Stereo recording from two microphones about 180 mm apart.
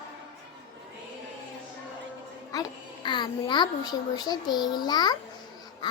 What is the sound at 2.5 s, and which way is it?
A child's voice, 25° left (ahead or behind).